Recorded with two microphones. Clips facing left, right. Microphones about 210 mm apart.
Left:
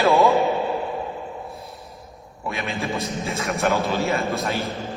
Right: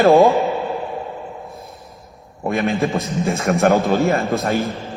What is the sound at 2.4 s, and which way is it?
A man's voice, 55° right (ahead or behind).